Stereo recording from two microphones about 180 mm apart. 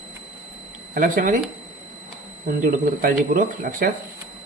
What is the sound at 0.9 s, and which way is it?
Speech, 50° right (ahead or behind).